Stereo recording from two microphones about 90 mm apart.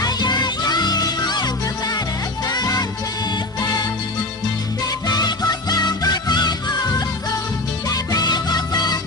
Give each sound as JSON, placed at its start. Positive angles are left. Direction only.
{"t": 0.0, "sound": "music", "side_deg": 50}
{"t": 4.9, "sound": "music", "side_deg": 50}